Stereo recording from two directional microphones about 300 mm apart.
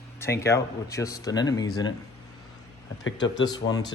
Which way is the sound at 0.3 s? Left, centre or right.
Centre.